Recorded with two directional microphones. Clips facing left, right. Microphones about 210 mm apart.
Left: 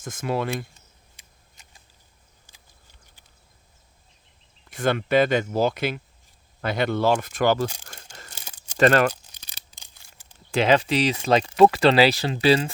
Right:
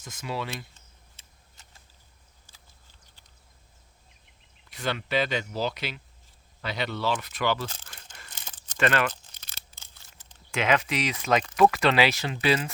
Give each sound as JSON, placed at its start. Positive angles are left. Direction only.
{"t": 0.0, "sound": "speech", "side_deg": 50}
{"t": 0.7, "sound": "a sound", "side_deg": 15}
{"t": 4.7, "sound": "speech", "side_deg": 50}
{"t": 8.3, "sound": "crumpling", "side_deg": 10}
{"t": 8.8, "sound": "speech", "side_deg": 40}
{"t": 9.2, "sound": "a sound", "side_deg": 15}
{"t": 10.5, "sound": "speech", "side_deg": 30}